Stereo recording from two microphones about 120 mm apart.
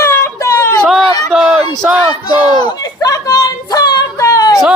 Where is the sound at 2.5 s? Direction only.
30° left (ahead or behind).